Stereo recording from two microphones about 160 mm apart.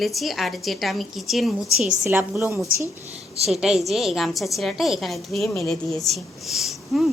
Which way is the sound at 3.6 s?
Centre (ahead or behind).